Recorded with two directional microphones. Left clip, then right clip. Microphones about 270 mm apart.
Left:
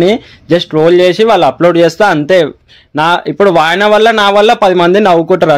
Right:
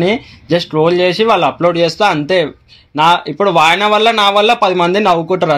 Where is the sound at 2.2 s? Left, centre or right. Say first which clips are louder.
Left 5 dB; left.